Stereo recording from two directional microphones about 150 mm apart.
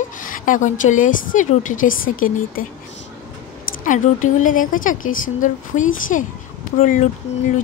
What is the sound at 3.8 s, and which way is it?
Speech, 60° left (ahead or behind).